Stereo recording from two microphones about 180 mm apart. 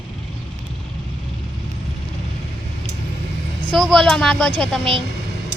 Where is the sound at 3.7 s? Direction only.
Centre (ahead or behind).